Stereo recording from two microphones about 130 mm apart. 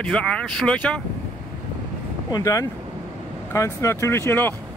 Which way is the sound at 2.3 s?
25° left (ahead or behind).